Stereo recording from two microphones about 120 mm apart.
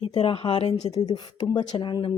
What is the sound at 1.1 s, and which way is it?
Speech, 35° left (ahead or behind).